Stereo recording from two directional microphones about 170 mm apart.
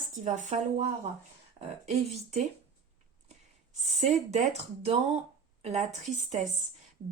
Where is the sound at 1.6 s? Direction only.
40° right (ahead or behind).